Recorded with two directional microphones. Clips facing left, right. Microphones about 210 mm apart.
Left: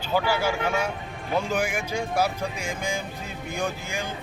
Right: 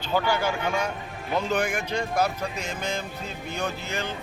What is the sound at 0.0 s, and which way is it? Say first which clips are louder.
A man's voice: left 1 dB; 10° left (ahead or behind).